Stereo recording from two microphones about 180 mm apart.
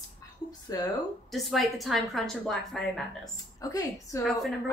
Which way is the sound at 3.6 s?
20° left (ahead or behind).